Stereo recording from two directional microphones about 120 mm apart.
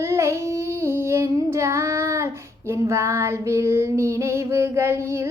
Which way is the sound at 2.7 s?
20° right (ahead or behind).